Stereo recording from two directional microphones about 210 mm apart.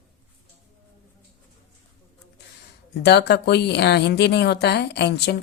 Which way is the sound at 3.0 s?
50° left (ahead or behind).